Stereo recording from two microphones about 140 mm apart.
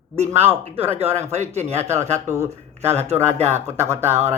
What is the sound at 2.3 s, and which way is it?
Speech, 20° right (ahead or behind).